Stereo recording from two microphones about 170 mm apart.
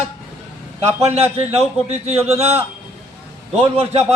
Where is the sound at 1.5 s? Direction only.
40° right (ahead or behind).